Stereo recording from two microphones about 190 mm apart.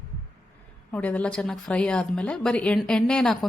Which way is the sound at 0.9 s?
5° left (ahead or behind).